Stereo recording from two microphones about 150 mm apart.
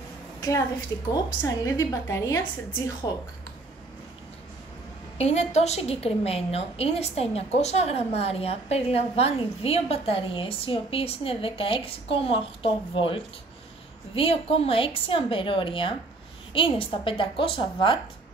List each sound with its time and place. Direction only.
0.9 s a woman's voice: 20° left (ahead or behind)
5.1 s a woman's voice: 45° left (ahead or behind)